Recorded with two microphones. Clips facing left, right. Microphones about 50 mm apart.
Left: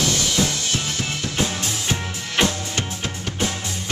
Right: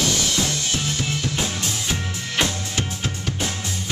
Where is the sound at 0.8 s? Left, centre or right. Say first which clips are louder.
Right 1 dB; centre.